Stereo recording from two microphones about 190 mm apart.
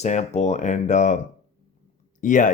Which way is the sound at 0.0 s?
35° left (ahead or behind).